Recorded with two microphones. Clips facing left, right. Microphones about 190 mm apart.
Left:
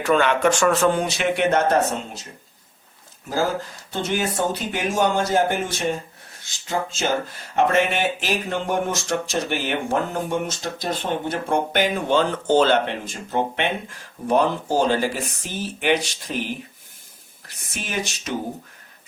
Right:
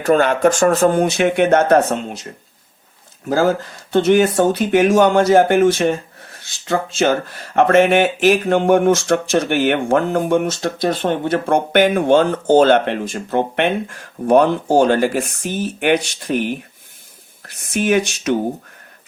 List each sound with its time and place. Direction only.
0.0 s speech: 40° right (ahead or behind); by 1.8 s 55° right (ahead or behind)
3.9 s speech: 65° right (ahead or behind)
6.7 s speech: 70° right (ahead or behind)
7.5 s speech: 60° right (ahead or behind)
17.7 s speech: 60° right (ahead or behind)